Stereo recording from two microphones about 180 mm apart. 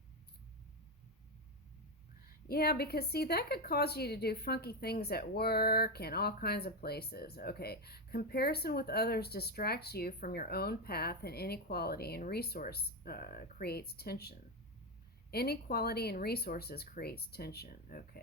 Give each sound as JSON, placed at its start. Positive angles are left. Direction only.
{"t": 2.5, "sound": "a woman's voice", "side_deg": 60}